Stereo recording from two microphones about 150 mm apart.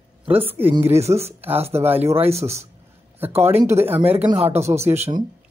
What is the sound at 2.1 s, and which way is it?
Speech, 40° right (ahead or behind).